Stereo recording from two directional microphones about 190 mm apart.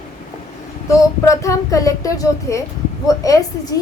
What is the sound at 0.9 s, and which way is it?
Speech, 15° left (ahead or behind).